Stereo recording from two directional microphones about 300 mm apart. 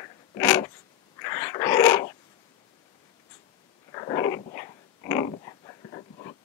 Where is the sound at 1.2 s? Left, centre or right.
Centre.